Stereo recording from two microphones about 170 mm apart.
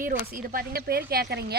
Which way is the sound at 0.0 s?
60° right (ahead or behind).